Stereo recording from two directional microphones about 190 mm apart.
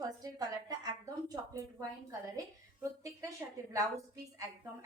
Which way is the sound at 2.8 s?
15° right (ahead or behind).